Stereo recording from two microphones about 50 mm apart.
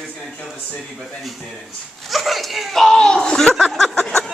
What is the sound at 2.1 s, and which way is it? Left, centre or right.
Speech, centre.